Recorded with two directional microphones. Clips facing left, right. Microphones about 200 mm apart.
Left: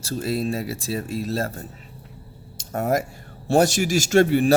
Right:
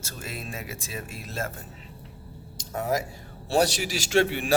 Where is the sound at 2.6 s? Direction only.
50° left (ahead or behind).